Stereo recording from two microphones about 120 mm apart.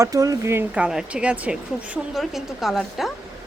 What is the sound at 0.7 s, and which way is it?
Speech, 5° right (ahead or behind).